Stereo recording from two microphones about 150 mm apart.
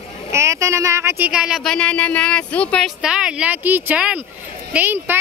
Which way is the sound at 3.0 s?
5° right (ahead or behind).